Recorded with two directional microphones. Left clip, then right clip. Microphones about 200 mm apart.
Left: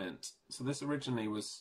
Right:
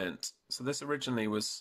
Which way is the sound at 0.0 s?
50° right (ahead or behind).